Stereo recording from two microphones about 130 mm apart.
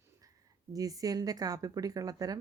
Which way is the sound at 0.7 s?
25° right (ahead or behind).